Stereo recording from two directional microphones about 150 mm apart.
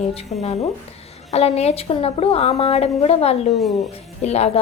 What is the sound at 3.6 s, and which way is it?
Speech, centre (ahead or behind).